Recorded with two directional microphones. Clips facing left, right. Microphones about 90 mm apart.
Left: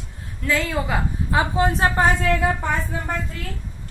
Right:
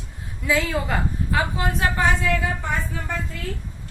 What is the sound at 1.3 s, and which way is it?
Speech, 25° left (ahead or behind).